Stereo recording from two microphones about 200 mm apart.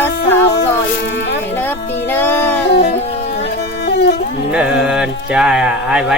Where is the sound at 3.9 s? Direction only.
55° left (ahead or behind).